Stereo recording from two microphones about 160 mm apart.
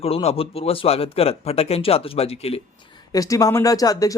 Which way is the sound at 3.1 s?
20° left (ahead or behind).